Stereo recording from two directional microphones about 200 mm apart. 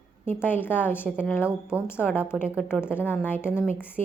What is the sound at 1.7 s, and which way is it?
Speech, 5° right (ahead or behind).